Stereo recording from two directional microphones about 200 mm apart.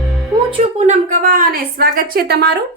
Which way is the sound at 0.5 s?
35° right (ahead or behind).